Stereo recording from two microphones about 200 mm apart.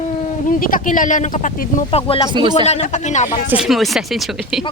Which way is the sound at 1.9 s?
25° left (ahead or behind).